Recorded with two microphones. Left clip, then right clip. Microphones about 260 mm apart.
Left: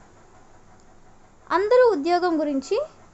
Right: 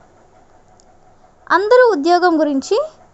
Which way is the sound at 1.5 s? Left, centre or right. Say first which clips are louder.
Right 7 dB; right.